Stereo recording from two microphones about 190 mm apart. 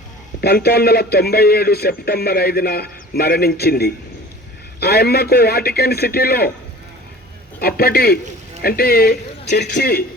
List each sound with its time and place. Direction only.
0.4 s speech: 55° left (ahead or behind)
7.6 s a man's voice: 55° left (ahead or behind)